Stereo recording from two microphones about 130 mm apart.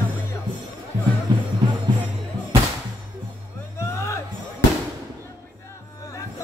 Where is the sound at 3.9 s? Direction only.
20° left (ahead or behind).